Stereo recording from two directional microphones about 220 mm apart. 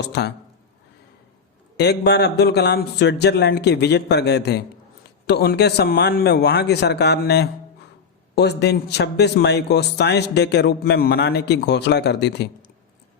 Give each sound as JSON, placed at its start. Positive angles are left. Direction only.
{"t": 0.0, "sound": "a man's voice", "side_deg": 50}
{"t": 1.7, "sound": "a man's voice", "side_deg": 50}